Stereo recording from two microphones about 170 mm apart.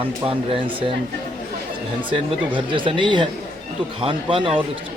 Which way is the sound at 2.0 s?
30° right (ahead or behind).